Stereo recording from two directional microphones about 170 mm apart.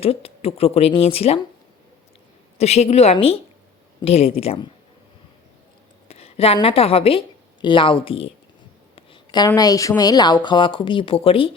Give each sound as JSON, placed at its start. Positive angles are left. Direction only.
{"t": 0.0, "sound": "speech", "side_deg": 35}
{"t": 2.6, "sound": "speech", "side_deg": 40}
{"t": 6.1, "sound": "a woman's voice", "side_deg": 35}
{"t": 9.0, "sound": "a sound", "side_deg": 25}
{"t": 9.6, "sound": "speech", "side_deg": 20}